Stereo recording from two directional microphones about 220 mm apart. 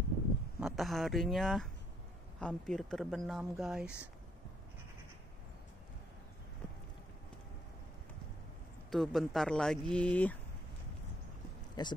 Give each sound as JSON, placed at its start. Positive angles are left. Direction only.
{"t": 0.6, "sound": "speech", "side_deg": 0}
{"t": 8.9, "sound": "speech", "side_deg": 0}
{"t": 11.8, "sound": "speech", "side_deg": 20}